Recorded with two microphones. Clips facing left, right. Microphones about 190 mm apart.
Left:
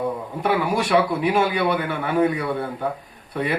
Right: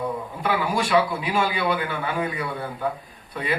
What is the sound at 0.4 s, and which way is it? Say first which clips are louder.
A man's voice: left 3 dB; 60° left (ahead or behind).